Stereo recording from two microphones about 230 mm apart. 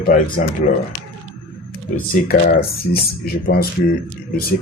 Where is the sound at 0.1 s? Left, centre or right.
Left.